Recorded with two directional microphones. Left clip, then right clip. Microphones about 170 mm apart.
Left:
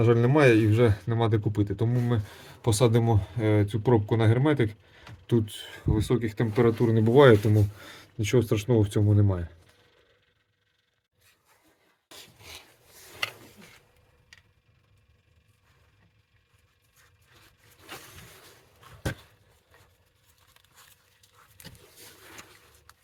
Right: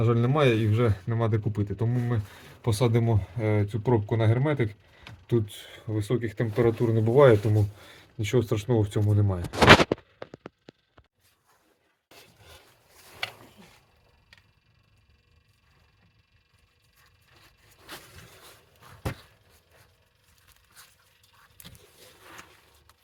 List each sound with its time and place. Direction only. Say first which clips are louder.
0.0 s speech: left 3 dB; 60° left (ahead or behind)
7.5 s speech: left 2 dB; 30° left (ahead or behind)